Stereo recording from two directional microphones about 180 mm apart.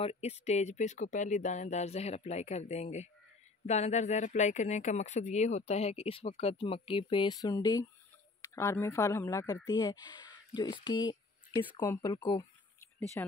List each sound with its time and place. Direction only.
0.0 s speech: 35° left (ahead or behind)
11.8 s speech: 15° left (ahead or behind)